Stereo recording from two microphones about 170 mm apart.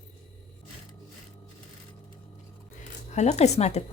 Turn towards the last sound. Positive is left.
turn(degrees=40)  # may be behind; listen again after turning